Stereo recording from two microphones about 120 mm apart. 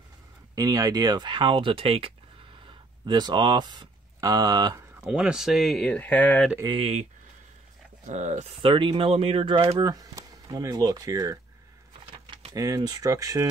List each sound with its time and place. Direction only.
0.6 s speech: 30° right (ahead or behind); by 2.1 s 50° right (ahead or behind)
2.6 s speech: 40° right (ahead or behind)
5.0 s speech: 5° right (ahead or behind); by 6.4 s 15° left (ahead or behind)
6.7 s speech: 60° right (ahead or behind)
8.0 s speech: 90° right
8.6 s speech: 45° right (ahead or behind)
9.8 s speech: 30° right (ahead or behind)
12.5 s speech: 30° right (ahead or behind)